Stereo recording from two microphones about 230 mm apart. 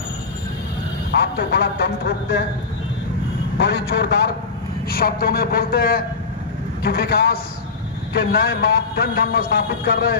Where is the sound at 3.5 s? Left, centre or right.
Left.